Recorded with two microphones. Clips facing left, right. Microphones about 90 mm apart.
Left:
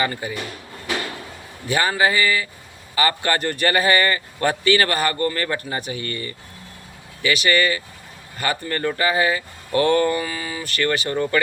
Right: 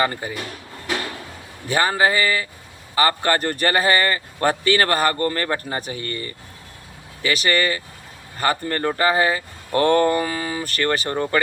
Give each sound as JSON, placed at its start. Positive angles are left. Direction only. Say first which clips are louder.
{"t": 0.0, "sound": "a man's voice", "louder": "right 2 dB", "side_deg": -35}
{"t": 1.6, "sound": "a man's voice", "louder": "right 1 dB", "side_deg": -35}